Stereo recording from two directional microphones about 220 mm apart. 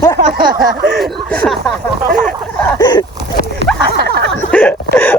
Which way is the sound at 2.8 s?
20° left (ahead or behind).